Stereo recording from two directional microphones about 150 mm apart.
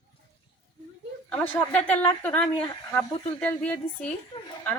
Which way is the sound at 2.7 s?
25° left (ahead or behind).